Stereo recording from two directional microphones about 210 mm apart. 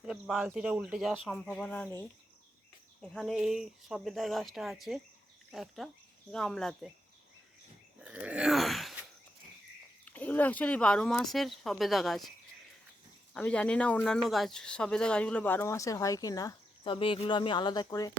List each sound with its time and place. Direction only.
0.0 s speech: 5° right (ahead or behind)
8.0 s groan: 5° right (ahead or behind)
10.1 s speech: 10° left (ahead or behind)
13.3 s speech: 5° left (ahead or behind)